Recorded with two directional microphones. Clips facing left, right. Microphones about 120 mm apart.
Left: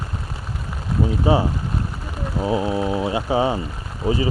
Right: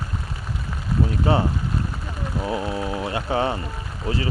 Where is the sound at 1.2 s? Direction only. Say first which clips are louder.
Left 3 dB; 15° left (ahead or behind).